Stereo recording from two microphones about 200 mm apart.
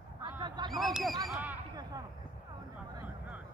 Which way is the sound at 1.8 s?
20° right (ahead or behind).